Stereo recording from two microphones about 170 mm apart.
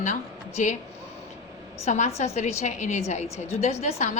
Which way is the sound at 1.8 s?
40° left (ahead or behind).